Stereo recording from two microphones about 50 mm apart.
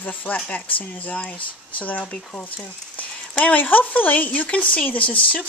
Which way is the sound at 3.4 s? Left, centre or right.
Left.